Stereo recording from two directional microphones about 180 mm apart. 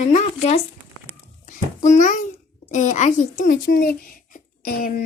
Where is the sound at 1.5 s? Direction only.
45° left (ahead or behind).